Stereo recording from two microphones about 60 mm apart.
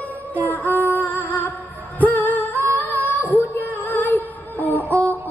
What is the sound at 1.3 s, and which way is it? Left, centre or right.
Music, left.